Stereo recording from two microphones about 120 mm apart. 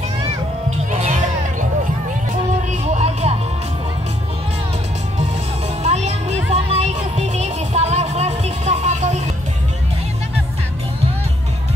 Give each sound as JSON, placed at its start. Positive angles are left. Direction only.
{"t": 0.7, "sound": "music", "side_deg": -70}
{"t": 2.9, "sound": "music", "side_deg": -65}
{"t": 5.9, "sound": "music", "side_deg": -65}